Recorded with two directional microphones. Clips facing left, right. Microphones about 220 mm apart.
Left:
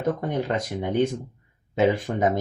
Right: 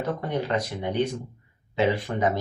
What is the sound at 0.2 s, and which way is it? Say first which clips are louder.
Speech: left 1 dB; 50° left (ahead or behind).